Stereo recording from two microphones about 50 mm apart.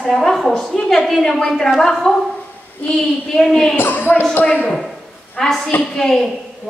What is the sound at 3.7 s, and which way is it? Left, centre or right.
Speech, left.